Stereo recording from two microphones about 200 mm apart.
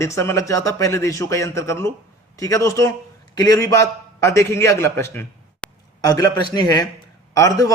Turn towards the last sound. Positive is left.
turn(degrees=15)  # may be behind; listen again after turning